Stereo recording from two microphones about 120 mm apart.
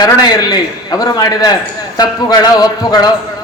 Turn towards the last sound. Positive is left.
turn(degrees=35)  # may be behind; listen again after turning